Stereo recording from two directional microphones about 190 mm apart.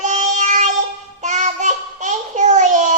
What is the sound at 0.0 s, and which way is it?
Child singing, 40° right (ahead or behind).